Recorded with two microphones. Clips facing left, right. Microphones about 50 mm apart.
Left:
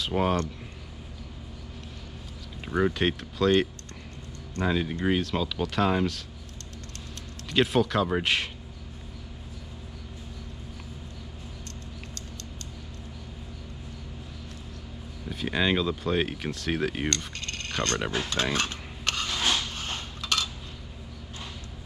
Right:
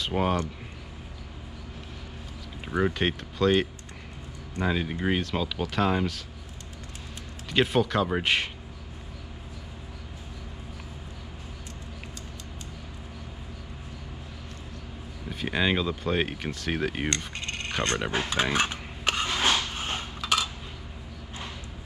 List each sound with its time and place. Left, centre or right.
0.0 s speech: centre
2.6 s speech: centre
7.4 s speech: centre
15.2 s speech: centre
17.2 s a sound: centre